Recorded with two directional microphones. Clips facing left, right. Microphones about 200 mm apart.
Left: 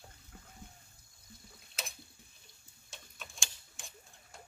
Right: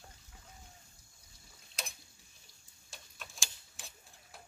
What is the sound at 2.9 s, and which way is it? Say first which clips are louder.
Tick-tock: left 1 dB; centre (ahead or behind).